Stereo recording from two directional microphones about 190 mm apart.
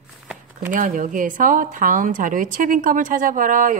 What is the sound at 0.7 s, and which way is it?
Speech, 45° right (ahead or behind).